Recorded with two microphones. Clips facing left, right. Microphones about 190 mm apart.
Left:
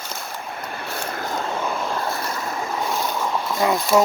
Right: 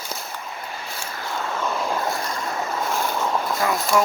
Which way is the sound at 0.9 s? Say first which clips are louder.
Left 5 dB; 60° left (ahead or behind).